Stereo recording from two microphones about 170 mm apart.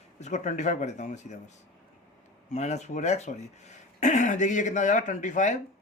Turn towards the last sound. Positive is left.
turn(degrees=45)  # may be behind; listen again after turning